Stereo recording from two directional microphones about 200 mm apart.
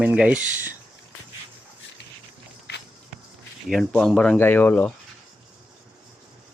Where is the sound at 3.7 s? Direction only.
Centre (ahead or behind).